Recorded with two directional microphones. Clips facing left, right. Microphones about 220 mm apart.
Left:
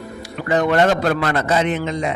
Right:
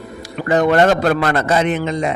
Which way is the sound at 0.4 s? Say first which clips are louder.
Right 3 dB; 45° right (ahead or behind).